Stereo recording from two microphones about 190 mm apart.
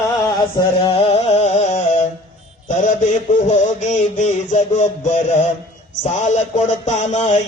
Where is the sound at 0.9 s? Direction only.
30° left (ahead or behind).